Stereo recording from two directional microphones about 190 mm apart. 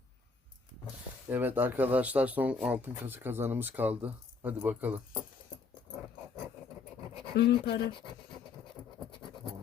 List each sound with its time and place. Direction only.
1.3 s speech: 10° right (ahead or behind)
7.3 s speech: 60° left (ahead or behind)